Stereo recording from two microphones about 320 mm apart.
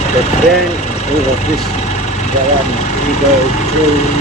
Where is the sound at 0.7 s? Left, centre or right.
Left.